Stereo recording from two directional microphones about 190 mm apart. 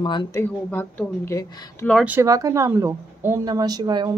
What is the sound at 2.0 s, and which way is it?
Speech, 15° right (ahead or behind).